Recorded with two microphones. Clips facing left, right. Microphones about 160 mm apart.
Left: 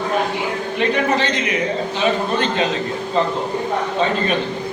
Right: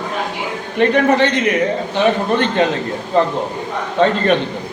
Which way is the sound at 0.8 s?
55° right (ahead or behind).